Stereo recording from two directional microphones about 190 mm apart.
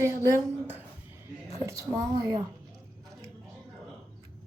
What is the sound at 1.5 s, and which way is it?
Speech, 15° right (ahead or behind).